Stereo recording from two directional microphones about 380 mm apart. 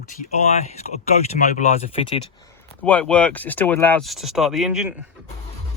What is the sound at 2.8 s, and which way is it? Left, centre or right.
Speech, centre.